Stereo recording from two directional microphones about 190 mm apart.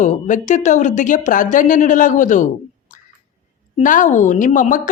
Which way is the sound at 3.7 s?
45° left (ahead or behind).